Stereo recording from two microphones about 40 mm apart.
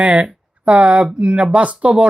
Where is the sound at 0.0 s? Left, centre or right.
Right.